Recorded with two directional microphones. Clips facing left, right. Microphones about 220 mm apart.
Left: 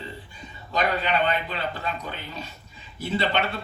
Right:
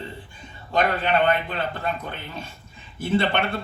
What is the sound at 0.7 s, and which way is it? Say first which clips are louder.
Speech: right 3 dB; 50° right (ahead or behind).